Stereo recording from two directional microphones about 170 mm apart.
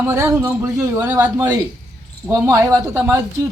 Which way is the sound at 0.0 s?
15° right (ahead or behind).